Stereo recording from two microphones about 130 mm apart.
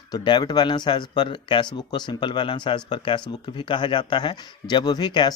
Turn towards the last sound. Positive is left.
turn(degrees=35)  # may be behind; listen again after turning